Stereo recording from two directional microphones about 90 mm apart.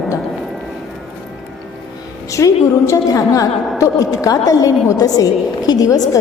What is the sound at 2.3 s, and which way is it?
A woman's voice, 35° left (ahead or behind).